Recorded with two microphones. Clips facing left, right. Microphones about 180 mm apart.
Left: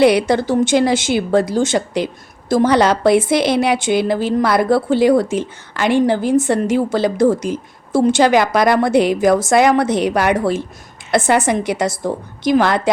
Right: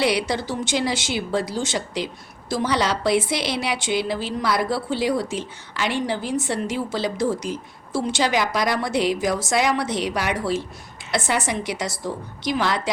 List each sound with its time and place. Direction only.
0.0 s a woman's voice: 50° left (ahead or behind)